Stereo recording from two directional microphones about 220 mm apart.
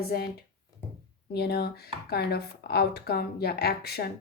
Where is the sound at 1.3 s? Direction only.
45° left (ahead or behind).